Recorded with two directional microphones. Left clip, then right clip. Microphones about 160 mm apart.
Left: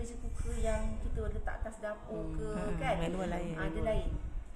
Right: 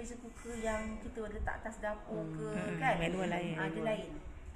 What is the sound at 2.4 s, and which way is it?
A woman's voice, 10° left (ahead or behind).